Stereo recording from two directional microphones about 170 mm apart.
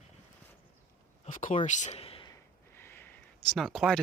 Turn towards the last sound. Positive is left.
turn(degrees=0)  # may be behind; listen again after turning